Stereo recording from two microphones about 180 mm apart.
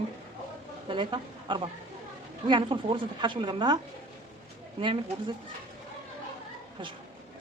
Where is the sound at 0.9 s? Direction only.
25° right (ahead or behind).